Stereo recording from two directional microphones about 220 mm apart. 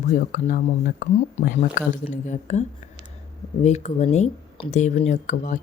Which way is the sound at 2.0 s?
30° left (ahead or behind).